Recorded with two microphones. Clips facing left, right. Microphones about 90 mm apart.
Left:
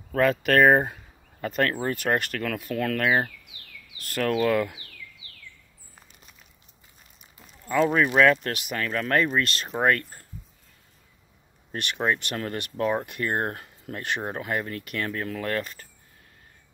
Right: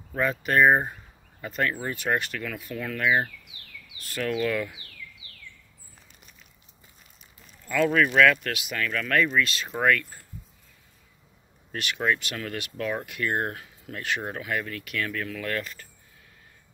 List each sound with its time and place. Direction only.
0.2 s speech: 80° left
1.4 s speech: 55° left (ahead or behind)
4.2 s speech: 45° left (ahead or behind)
7.6 s speech: 30° left (ahead or behind)
11.7 s speech: 35° left (ahead or behind)